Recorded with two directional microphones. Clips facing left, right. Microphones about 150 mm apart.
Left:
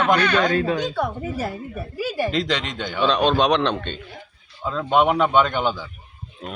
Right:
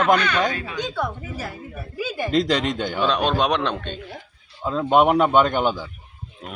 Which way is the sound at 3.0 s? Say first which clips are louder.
Left 3 dB; 10° right (ahead or behind).